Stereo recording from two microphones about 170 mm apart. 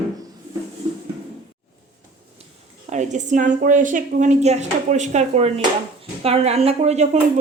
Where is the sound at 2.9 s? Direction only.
45° right (ahead or behind).